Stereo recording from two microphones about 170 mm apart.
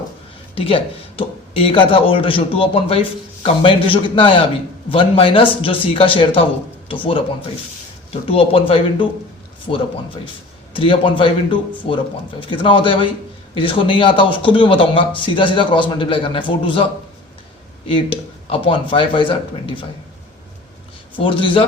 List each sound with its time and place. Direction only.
0.5 s speech: 35° left (ahead or behind)
10.8 s speech: 30° left (ahead or behind)
17.8 s speech: 30° left (ahead or behind)
21.2 s speech: 30° left (ahead or behind)